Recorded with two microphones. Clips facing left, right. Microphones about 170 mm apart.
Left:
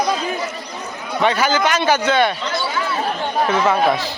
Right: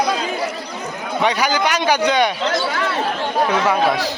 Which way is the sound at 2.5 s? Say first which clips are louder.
Right 2 dB; 70° right (ahead or behind).